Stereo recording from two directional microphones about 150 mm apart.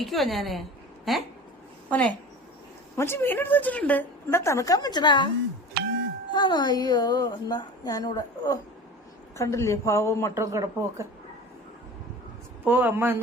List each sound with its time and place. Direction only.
0.0 s a woman's voice: centre (ahead or behind); by 5.3 s 30° left (ahead or behind)
6.3 s speech: 30° left (ahead or behind)
10.3 s a man's voice: 20° right (ahead or behind)
12.6 s speech: 15° right (ahead or behind)